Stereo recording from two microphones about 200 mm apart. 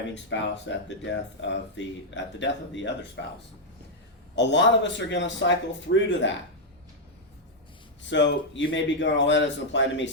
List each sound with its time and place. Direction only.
0.1 s speech: 65° left (ahead or behind)
4.4 s speech: 60° left (ahead or behind)
8.1 s speech: 60° left (ahead or behind)